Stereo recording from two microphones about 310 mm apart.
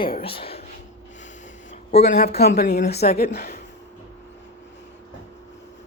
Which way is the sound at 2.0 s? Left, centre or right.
Left.